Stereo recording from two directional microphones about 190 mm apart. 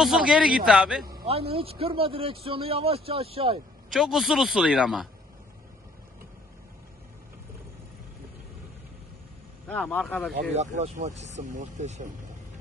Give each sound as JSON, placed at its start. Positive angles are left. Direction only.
{"t": 0.0, "sound": "speech", "side_deg": -5}
{"t": 1.2, "sound": "speech", "side_deg": -30}
{"t": 3.9, "sound": "speech", "side_deg": 0}
{"t": 9.7, "sound": "speech", "side_deg": 10}
{"t": 10.5, "sound": "speech", "side_deg": -35}